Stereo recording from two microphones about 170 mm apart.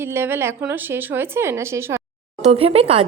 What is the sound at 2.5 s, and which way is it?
Speech, 35° right (ahead or behind).